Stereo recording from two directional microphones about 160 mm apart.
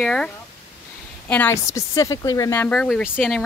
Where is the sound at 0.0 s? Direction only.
5° left (ahead or behind).